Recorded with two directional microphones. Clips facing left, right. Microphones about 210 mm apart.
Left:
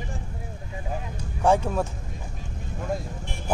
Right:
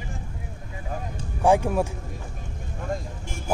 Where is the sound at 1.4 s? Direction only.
15° right (ahead or behind).